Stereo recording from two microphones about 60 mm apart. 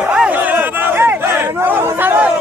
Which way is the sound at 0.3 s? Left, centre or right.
Right.